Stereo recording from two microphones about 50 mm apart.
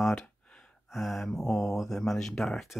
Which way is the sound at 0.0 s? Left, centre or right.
Centre.